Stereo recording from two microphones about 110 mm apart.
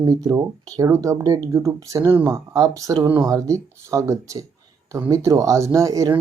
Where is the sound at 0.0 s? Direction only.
35° right (ahead or behind).